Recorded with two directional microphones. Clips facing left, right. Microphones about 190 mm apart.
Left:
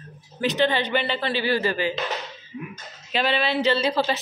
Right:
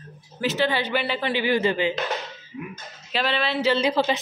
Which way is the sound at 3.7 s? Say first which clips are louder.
Right 1 dB; 15° right (ahead or behind).